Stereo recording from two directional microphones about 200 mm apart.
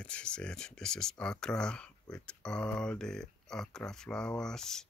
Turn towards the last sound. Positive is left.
turn(degrees=5)  # may be behind; listen again after turning